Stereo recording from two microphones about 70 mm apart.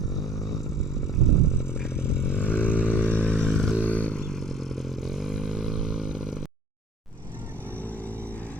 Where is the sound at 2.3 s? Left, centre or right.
Left.